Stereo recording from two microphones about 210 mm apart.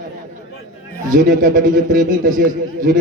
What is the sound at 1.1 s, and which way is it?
A man's voice, 40° right (ahead or behind).